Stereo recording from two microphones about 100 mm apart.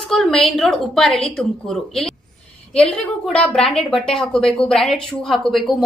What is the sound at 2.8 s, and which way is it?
A woman's voice, 10° left (ahead or behind).